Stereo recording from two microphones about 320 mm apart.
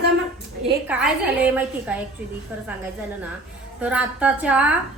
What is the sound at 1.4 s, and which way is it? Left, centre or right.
Speech, centre.